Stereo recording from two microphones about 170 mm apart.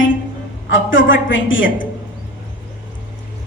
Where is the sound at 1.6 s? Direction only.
55° left (ahead or behind).